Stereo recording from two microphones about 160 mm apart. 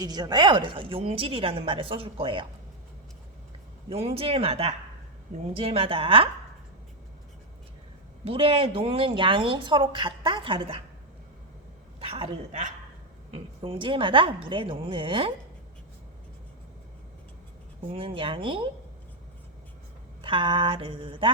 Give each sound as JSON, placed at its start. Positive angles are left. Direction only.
{"t": 0.0, "sound": "speech", "side_deg": -25}
{"t": 3.8, "sound": "speech", "side_deg": -40}
{"t": 8.2, "sound": "speech", "side_deg": -35}
{"t": 11.9, "sound": "speech", "side_deg": -35}
{"t": 13.3, "sound": "speech", "side_deg": -35}
{"t": 17.9, "sound": "speech", "side_deg": -35}
{"t": 20.2, "sound": "speech", "side_deg": -30}